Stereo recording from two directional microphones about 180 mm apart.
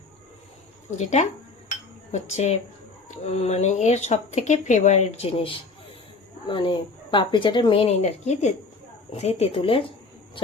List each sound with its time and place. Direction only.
0.9 s speech: 40° left (ahead or behind)